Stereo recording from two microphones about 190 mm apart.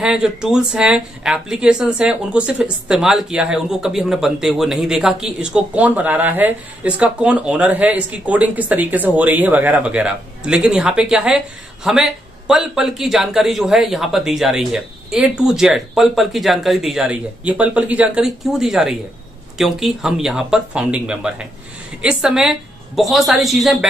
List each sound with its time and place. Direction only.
0.0 s speech: 5° right (ahead or behind)